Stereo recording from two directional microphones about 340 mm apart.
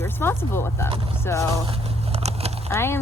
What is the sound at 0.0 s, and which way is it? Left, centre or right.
Speech, centre.